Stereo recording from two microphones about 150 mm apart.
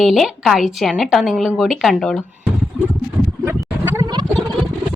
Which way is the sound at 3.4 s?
15° right (ahead or behind).